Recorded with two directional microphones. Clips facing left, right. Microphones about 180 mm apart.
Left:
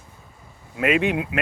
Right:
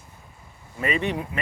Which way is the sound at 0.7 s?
80° left.